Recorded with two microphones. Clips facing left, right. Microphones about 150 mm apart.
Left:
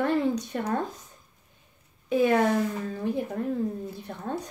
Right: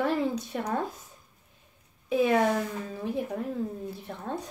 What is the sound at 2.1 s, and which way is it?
Speech, centre (ahead or behind).